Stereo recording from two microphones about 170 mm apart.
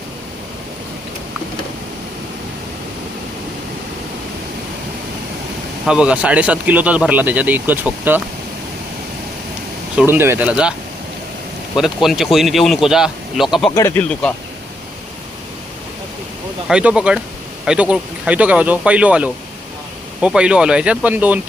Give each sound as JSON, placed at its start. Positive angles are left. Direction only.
{"t": 5.8, "sound": "speech", "side_deg": -5}
{"t": 10.1, "sound": "speech", "side_deg": -10}
{"t": 11.8, "sound": "speech", "side_deg": 0}
{"t": 13.7, "sound": "speech", "side_deg": 15}
{"t": 16.6, "sound": "speech", "side_deg": -5}